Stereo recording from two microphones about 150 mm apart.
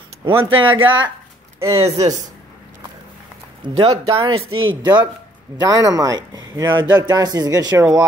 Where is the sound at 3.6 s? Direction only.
35° right (ahead or behind).